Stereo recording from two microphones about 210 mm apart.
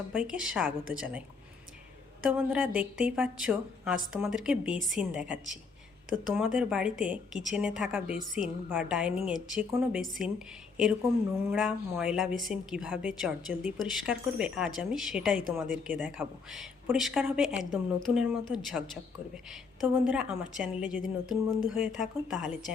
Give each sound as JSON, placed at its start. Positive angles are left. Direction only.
{"t": 0.1, "sound": "speech", "side_deg": -5}
{"t": 2.2, "sound": "speech", "side_deg": -5}